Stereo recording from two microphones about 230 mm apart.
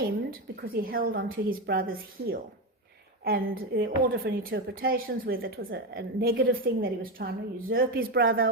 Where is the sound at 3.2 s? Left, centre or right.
Right.